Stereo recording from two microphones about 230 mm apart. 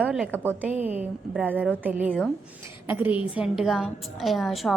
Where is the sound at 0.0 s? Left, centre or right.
Centre.